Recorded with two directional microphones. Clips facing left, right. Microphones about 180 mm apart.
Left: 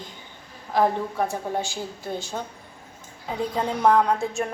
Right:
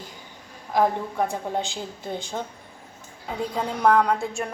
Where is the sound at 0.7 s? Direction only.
15° right (ahead or behind).